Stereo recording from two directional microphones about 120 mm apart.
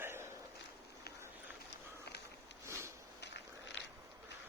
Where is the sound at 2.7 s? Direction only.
25° right (ahead or behind).